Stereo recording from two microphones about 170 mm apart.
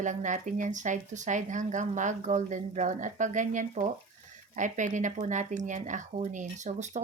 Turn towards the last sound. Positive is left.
turn(degrees=-45)  # may be behind; listen again after turning